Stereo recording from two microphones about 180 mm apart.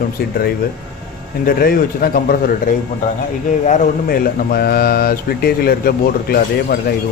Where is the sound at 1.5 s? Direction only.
55° left (ahead or behind).